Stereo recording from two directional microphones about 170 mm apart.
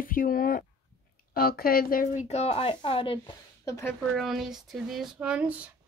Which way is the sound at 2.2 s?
35° left (ahead or behind).